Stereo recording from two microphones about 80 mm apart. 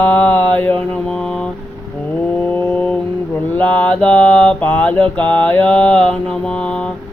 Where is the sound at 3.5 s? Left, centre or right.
Centre.